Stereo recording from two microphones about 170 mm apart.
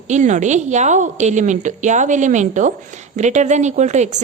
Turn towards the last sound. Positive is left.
turn(degrees=-45)  # may be behind; listen again after turning